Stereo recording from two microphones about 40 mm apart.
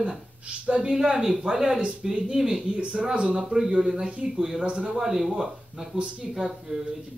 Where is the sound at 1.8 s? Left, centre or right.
Right.